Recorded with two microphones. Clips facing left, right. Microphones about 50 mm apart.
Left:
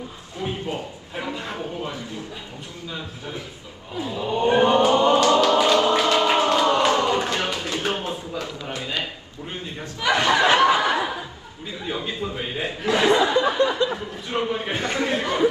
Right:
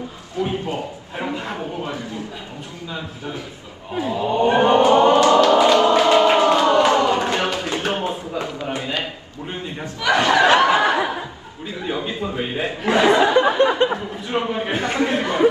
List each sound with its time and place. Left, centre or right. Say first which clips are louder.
1.2 s a man's voice: right 4 dB; right
3.9 s a sound: right 5 dB; right
10.1 s snicker: right 3 dB; right
11.9 s speech: right 3 dB; right